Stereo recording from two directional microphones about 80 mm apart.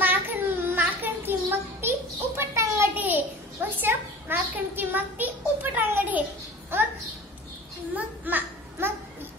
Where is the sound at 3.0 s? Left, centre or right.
Right.